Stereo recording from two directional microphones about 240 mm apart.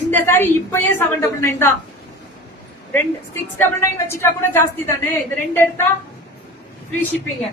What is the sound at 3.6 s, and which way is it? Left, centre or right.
A woman's voice, centre.